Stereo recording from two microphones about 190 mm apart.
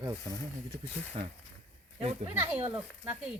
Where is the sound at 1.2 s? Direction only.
30° right (ahead or behind).